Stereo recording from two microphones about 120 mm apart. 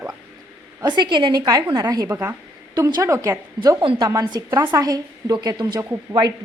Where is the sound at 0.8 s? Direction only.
35° right (ahead or behind).